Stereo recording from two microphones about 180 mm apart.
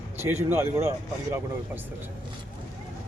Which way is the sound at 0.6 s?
15° right (ahead or behind).